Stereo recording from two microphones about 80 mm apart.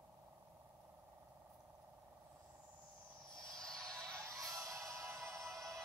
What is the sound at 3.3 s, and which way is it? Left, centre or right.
Music, centre.